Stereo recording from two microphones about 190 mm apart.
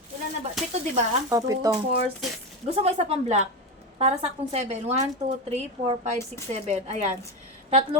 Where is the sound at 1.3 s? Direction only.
20° right (ahead or behind).